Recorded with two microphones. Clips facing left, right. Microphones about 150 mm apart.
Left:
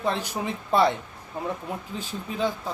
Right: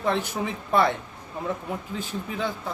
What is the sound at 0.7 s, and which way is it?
Speech, 20° left (ahead or behind).